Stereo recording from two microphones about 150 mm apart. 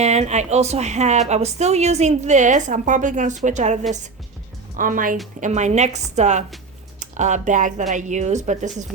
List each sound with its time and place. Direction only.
0.0 s a woman's voice: 50° right (ahead or behind)
4.8 s speech: 65° right (ahead or behind)
5.4 s a woman's voice: 50° right (ahead or behind)